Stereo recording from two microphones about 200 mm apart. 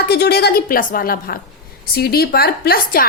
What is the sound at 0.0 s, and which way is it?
A woman's voice, 55° left (ahead or behind).